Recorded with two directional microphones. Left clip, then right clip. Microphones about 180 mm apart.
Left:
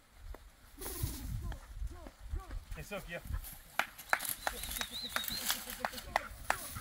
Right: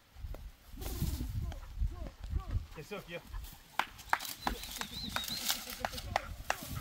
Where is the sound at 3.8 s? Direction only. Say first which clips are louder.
Even; 35° left (ahead or behind).